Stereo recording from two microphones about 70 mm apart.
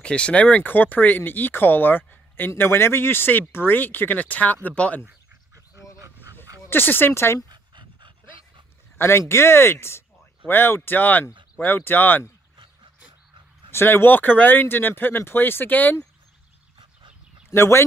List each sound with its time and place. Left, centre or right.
0.0 s speech: centre
5.9 s dog: right
6.7 s speech: left
8.9 s speech: left
13.7 s speech: left
17.5 s speech: left